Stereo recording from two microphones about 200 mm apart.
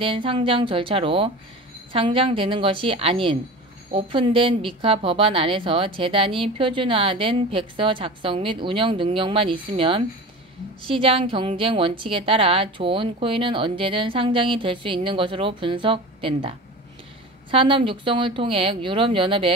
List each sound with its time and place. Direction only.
0.0 s a woman's voice: 25° right (ahead or behind)